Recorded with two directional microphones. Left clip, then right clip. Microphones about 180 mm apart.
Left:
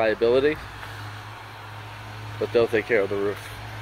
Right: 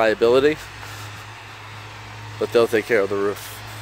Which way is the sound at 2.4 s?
35° right (ahead or behind).